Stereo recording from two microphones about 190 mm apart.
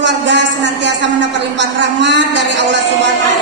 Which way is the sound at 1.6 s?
70° right (ahead or behind).